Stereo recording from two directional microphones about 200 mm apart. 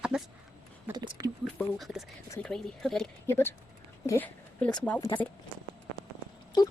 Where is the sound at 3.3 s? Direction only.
10° left (ahead or behind).